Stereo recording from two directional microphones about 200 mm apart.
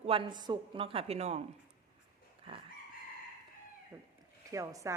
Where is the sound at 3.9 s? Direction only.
10° right (ahead or behind).